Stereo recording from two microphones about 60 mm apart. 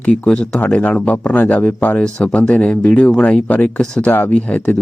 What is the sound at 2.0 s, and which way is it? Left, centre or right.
Speech, centre.